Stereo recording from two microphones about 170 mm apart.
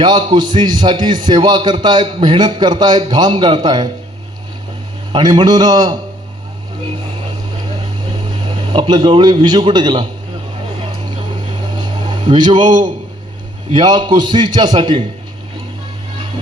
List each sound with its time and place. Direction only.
0.0 s a man's voice: 25° right (ahead or behind)
5.1 s a man's voice: 25° right (ahead or behind)
8.7 s a man's voice: 30° right (ahead or behind)
12.0 s a man's voice: 25° right (ahead or behind)